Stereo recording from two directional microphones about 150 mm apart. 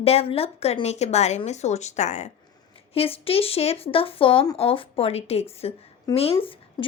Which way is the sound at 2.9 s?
40° left (ahead or behind).